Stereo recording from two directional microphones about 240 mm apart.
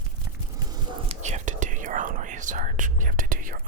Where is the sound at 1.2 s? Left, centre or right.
Right.